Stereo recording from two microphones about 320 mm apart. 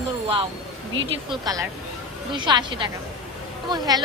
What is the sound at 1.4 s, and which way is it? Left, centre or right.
A woman's voice, centre.